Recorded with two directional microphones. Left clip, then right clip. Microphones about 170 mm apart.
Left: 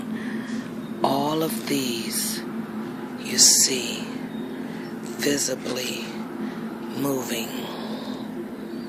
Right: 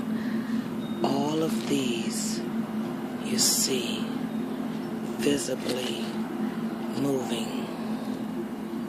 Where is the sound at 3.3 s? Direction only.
10° left (ahead or behind).